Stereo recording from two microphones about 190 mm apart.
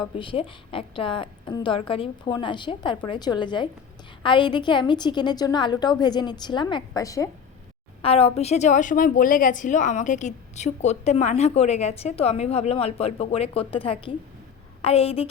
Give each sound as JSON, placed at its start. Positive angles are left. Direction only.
{"t": 0.2, "sound": "a woman's voice", "side_deg": 25}
{"t": 8.0, "sound": "a woman's voice", "side_deg": 30}